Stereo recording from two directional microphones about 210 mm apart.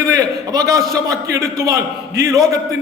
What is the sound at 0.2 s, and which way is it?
A man's voice, 15° right (ahead or behind).